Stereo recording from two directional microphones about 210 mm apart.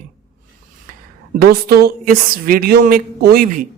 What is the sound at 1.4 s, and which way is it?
A woman's voice, 50° right (ahead or behind).